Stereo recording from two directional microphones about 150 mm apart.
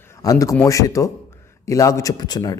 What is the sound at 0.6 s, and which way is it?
A man's voice, 20° left (ahead or behind).